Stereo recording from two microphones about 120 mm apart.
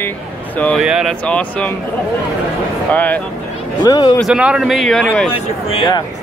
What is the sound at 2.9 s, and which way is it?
Speech, 15° left (ahead or behind).